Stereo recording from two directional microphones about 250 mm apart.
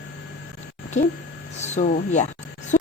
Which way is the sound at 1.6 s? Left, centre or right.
Left.